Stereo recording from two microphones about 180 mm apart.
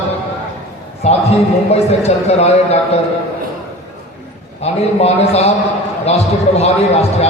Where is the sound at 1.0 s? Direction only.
35° left (ahead or behind).